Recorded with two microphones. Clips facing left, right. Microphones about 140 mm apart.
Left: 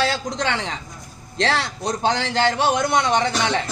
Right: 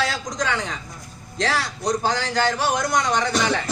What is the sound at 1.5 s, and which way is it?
A woman's voice, 25° left (ahead or behind).